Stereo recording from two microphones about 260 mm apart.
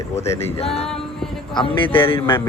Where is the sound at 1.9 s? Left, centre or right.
Left.